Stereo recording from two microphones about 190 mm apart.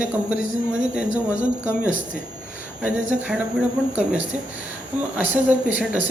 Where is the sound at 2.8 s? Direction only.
5° right (ahead or behind).